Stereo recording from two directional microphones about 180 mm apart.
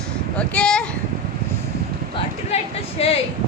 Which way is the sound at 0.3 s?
5° left (ahead or behind).